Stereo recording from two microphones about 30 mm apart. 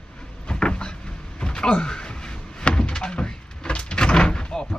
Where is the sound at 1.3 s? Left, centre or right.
Left.